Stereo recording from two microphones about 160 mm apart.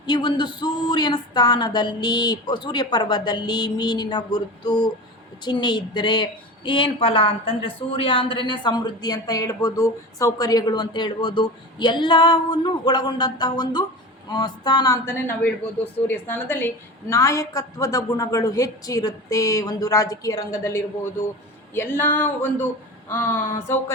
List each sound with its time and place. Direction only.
0.0 s speech: 30° left (ahead or behind)
15.0 s speech: 15° left (ahead or behind)